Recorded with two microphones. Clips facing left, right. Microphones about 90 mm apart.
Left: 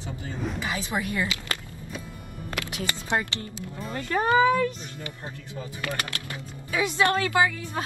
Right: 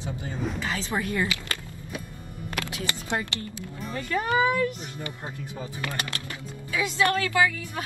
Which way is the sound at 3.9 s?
30° left (ahead or behind).